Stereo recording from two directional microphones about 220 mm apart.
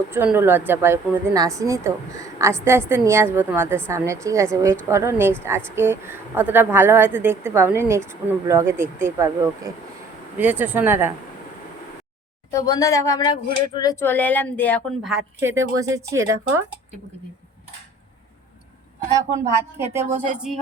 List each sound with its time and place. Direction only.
0.1 s speech: 10° right (ahead or behind)
12.5 s speech: 15° left (ahead or behind)
15.1 s speech: 10° right (ahead or behind)
19.9 s speech: 10° right (ahead or behind)